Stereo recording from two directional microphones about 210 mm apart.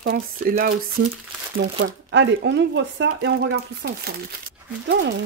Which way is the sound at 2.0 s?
55° right (ahead or behind).